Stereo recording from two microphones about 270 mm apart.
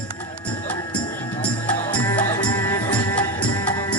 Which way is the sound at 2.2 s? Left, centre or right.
Centre.